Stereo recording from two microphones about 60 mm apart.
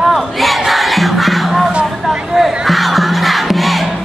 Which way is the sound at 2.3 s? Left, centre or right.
Centre.